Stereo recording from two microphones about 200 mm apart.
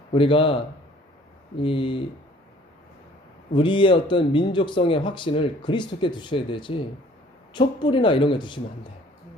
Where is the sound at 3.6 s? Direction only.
25° left (ahead or behind).